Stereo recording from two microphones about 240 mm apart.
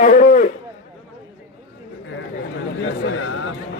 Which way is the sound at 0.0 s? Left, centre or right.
Left.